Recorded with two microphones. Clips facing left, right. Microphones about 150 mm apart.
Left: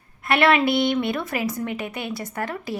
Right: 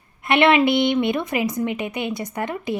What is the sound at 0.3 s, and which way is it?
A woman's voice, 20° right (ahead or behind).